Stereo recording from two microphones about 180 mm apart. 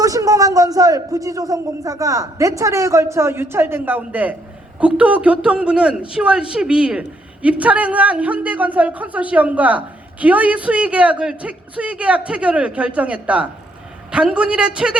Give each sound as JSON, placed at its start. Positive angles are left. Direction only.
{"t": 0.0, "sound": "a man's voice", "side_deg": -20}